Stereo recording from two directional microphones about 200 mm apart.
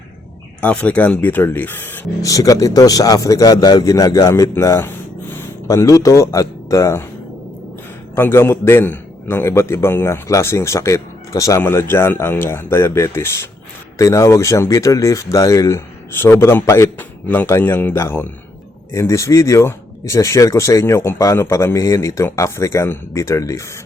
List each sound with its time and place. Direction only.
0.6 s speech: 5° left (ahead or behind)
8.1 s speech: 10° left (ahead or behind)